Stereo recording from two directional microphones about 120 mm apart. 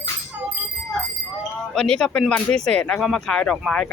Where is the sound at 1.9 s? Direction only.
5° left (ahead or behind).